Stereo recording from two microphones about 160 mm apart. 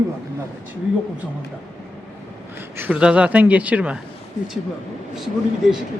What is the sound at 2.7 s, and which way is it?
A man's voice, 10° right (ahead or behind).